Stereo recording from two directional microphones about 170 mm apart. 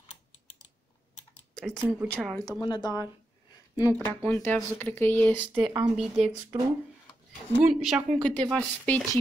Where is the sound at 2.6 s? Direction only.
25° left (ahead or behind).